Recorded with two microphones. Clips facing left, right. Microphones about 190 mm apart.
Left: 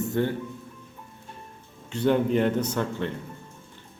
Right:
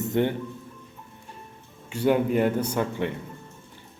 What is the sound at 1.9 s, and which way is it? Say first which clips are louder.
A man's voice: even; 10° right (ahead or behind).